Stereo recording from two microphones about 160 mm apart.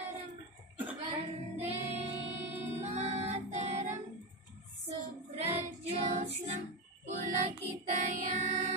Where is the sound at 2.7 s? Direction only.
45° right (ahead or behind).